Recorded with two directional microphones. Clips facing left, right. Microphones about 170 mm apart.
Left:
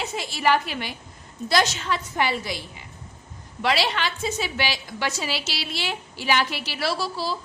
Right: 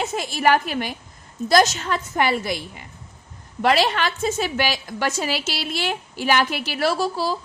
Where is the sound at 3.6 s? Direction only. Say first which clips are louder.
Right 5 dB; 45° right (ahead or behind).